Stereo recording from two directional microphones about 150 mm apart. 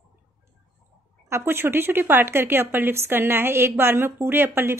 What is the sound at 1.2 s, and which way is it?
A woman's voice, 15° right (ahead or behind).